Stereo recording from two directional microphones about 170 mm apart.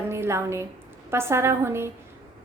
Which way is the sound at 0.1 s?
15° right (ahead or behind).